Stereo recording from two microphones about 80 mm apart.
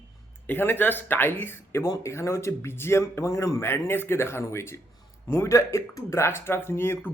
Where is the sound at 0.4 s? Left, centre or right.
Left.